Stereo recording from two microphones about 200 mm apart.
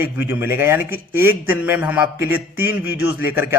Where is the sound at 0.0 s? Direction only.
10° right (ahead or behind).